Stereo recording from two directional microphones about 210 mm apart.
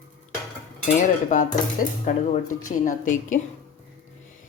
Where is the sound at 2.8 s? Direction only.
40° left (ahead or behind).